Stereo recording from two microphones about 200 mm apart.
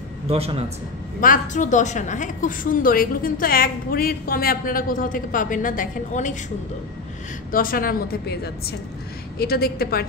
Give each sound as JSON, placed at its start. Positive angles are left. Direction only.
{"t": 0.3, "sound": "speech", "side_deg": -30}
{"t": 1.2, "sound": "a woman's voice", "side_deg": 40}
{"t": 7.5, "sound": "a woman's voice", "side_deg": 45}